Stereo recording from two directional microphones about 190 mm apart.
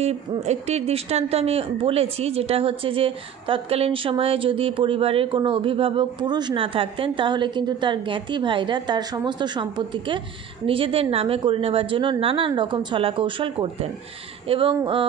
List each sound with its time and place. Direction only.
0.0 s speech: 35° right (ahead or behind)